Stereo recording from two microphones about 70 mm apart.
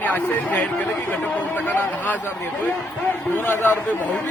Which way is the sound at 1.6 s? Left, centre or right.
Left.